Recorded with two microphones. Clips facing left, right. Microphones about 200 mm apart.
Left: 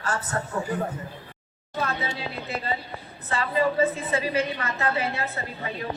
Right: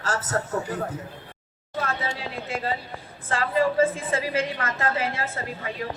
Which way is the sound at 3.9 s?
90° right.